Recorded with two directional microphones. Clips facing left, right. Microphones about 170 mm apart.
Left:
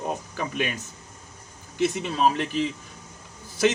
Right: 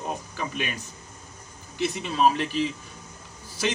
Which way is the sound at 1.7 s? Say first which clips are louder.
Left 2 dB; 50° left (ahead or behind).